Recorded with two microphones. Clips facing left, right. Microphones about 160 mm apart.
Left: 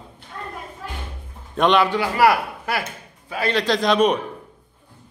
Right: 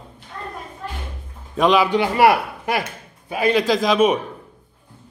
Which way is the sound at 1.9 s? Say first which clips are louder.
Right 2 dB; 20° right (ahead or behind).